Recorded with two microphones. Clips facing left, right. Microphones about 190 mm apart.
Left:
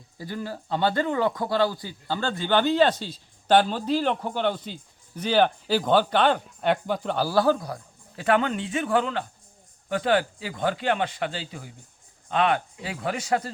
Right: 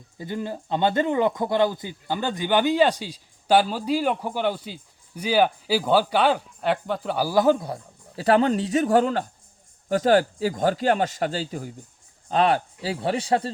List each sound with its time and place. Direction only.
0.2 s speech: 20° right (ahead or behind)